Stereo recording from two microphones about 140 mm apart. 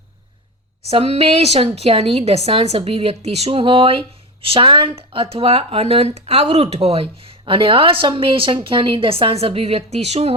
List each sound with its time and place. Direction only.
0.9 s a woman's voice: 45° right (ahead or behind)